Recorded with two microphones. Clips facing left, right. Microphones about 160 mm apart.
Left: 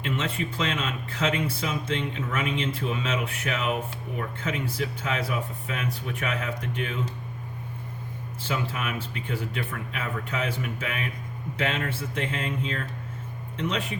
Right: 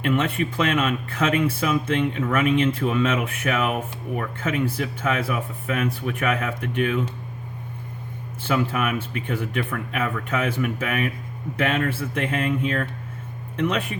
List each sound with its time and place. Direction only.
0.0 s speech: 55° right (ahead or behind)
8.4 s speech: 55° right (ahead or behind)